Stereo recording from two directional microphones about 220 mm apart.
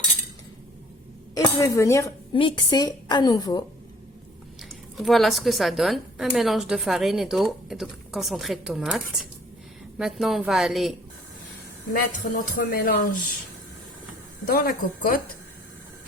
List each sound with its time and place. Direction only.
1.4 s speech: 15° left (ahead or behind)
4.9 s a woman's voice: centre (ahead or behind)
10.0 s a woman's voice: centre (ahead or behind)
11.9 s speech: 40° left (ahead or behind)
14.5 s speech: 40° left (ahead or behind)